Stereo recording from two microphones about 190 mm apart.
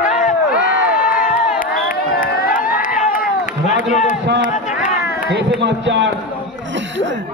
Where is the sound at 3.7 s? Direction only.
40° left (ahead or behind).